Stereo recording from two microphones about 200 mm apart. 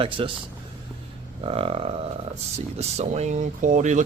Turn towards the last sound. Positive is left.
turn(degrees=-40)  # may be behind; listen again after turning